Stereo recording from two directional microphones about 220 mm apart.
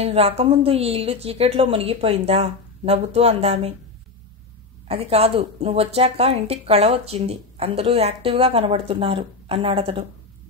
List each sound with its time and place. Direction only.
0.0 s speech: 25° right (ahead or behind)
4.8 s speech: 25° right (ahead or behind)